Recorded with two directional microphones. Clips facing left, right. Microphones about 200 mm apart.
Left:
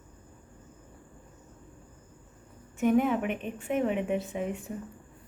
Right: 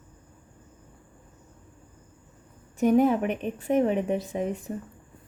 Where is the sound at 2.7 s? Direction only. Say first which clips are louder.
Right 4 dB; 35° right (ahead or behind).